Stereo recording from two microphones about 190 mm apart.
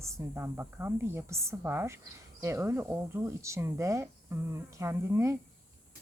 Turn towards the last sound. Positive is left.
turn(degrees=-15)  # may be behind; listen again after turning